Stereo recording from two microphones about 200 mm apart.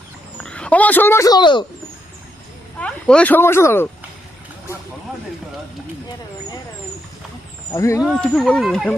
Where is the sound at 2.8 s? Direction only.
5° left (ahead or behind).